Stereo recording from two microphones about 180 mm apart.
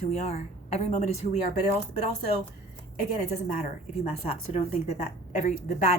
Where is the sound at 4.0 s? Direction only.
35° left (ahead or behind).